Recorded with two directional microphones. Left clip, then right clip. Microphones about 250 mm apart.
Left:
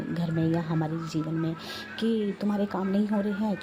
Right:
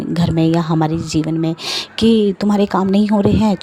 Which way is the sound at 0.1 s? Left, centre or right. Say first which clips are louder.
Right 13 dB; right.